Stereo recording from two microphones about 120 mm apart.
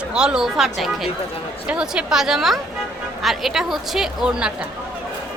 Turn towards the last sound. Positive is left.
turn(degrees=-5)  # may be behind; listen again after turning